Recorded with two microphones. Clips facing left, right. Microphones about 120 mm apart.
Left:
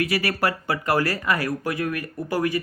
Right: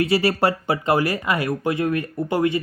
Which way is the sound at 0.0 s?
25° right (ahead or behind).